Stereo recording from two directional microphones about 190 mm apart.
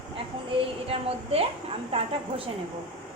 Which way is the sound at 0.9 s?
30° right (ahead or behind).